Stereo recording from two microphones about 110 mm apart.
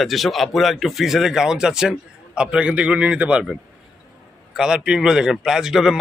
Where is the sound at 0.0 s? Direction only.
Centre (ahead or behind).